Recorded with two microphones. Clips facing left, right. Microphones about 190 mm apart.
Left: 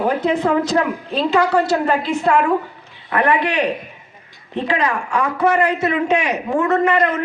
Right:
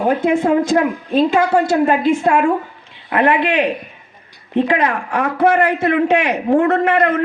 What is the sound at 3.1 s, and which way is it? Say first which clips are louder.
Speech: right 2 dB; 20° right (ahead or behind).